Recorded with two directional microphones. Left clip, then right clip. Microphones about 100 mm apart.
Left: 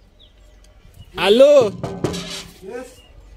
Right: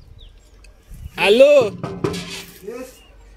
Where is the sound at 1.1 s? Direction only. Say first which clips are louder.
Even; 50° left (ahead or behind).